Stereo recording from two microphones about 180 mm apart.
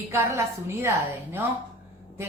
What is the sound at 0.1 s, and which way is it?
Speech, 15° right (ahead or behind).